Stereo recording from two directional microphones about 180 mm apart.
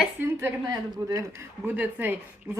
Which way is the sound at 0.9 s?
20° right (ahead or behind).